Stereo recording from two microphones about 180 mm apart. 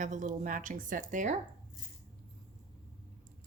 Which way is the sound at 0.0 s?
45° right (ahead or behind).